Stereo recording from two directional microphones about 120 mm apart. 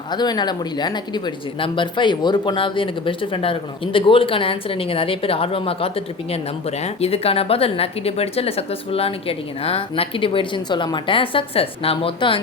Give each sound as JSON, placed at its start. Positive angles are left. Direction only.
{"t": 0.1, "sound": "speech", "side_deg": 35}